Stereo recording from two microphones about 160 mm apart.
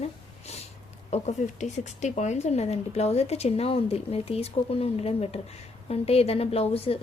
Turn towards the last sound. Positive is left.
turn(degrees=35)  # may be behind; listen again after turning